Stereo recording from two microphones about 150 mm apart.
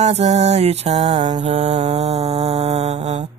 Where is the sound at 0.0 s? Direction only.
45° right (ahead or behind).